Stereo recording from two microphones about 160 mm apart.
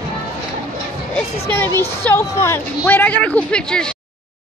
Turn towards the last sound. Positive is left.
turn(degrees=5)  # may be behind; listen again after turning